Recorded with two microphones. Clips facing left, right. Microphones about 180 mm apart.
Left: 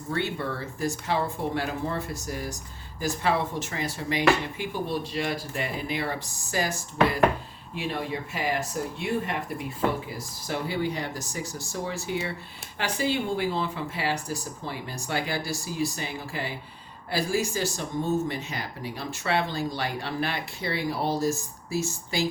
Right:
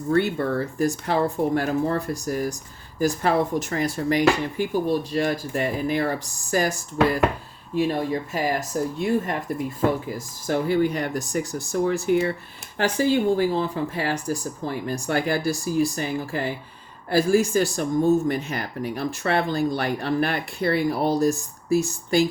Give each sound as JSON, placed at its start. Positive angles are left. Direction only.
{"t": 0.1, "sound": "speech", "side_deg": -50}
{"t": 7.8, "sound": "speech", "side_deg": -40}
{"t": 12.8, "sound": "speech", "side_deg": -40}